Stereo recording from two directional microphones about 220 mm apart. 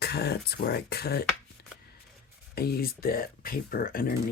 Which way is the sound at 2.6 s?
45° left (ahead or behind).